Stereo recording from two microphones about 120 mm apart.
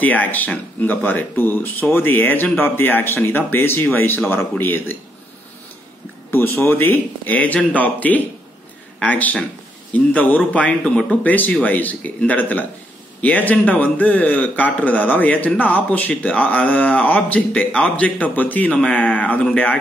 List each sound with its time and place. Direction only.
0.0 s a man's voice: 15° left (ahead or behind)
6.3 s a man's voice: 20° left (ahead or behind)